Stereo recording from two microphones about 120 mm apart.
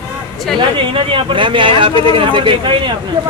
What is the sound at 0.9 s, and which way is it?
Speech, 50° right (ahead or behind).